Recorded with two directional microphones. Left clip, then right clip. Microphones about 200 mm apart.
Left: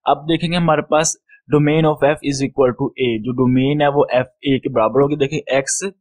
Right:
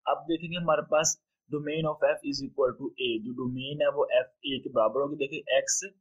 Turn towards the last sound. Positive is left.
turn(degrees=40)  # may be behind; listen again after turning